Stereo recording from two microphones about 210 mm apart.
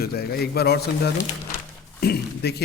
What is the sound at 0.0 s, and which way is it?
A man's voice, 45° left (ahead or behind).